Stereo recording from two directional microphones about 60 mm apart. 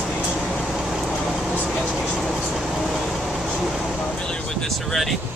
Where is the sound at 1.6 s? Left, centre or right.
Centre.